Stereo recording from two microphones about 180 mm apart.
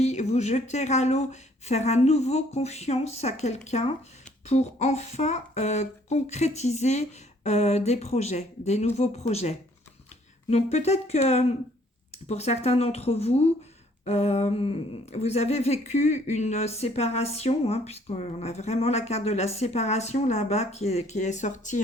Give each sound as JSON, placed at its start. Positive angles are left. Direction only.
{"t": 0.0, "sound": "speech", "side_deg": 40}